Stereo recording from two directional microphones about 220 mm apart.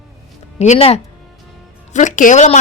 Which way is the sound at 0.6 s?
30° left (ahead or behind).